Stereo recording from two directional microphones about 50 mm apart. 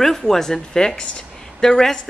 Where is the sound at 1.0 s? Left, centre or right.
Centre.